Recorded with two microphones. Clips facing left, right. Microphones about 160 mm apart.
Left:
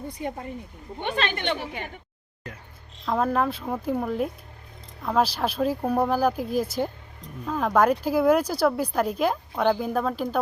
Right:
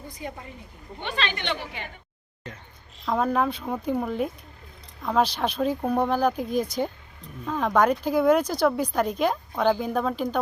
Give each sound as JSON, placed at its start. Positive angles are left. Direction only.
{"t": 1.0, "sound": "a woman's voice", "side_deg": 50}
{"t": 3.1, "sound": "speech", "side_deg": 0}